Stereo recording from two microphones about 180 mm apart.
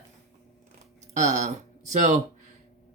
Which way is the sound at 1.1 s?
40° right (ahead or behind).